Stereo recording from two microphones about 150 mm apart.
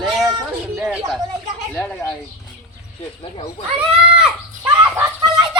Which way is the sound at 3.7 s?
5° right (ahead or behind).